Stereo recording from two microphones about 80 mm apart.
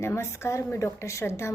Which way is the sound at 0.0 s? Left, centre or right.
Left.